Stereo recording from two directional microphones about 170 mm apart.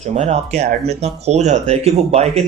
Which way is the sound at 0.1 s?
40° right (ahead or behind).